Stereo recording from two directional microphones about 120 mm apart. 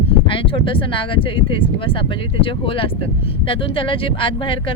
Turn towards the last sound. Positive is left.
turn(degrees=45)  # may be behind; listen again after turning